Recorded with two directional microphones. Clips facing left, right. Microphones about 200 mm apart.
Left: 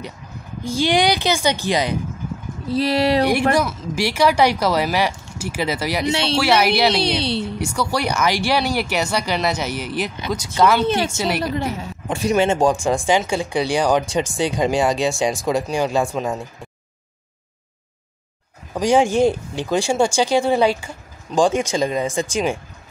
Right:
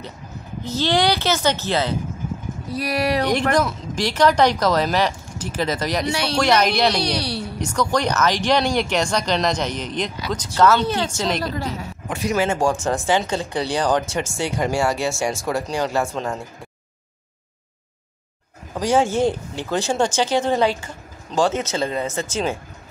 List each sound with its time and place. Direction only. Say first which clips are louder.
0.7 s speech: left 2 dB; 15° left (ahead or behind)
2.7 s speech: left 4 dB; 25° left (ahead or behind)
3.5 s speech: even; 10° left (ahead or behind)
6.0 s speech: left 3 dB; 25° left (ahead or behind)
6.3 s speech: even; 10° left (ahead or behind)
7.0 s speech: left 3 dB; 25° left (ahead or behind)
7.5 s speech: right 1 dB; 10° left (ahead or behind)
11.5 s speech: left 3 dB; 25° left (ahead or behind)
18.8 s speech: left 3 dB; 15° left (ahead or behind)